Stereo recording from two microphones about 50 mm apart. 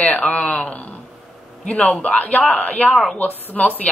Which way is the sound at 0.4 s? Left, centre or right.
Centre.